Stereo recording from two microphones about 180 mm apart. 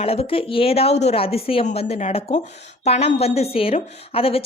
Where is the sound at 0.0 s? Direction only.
35° left (ahead or behind).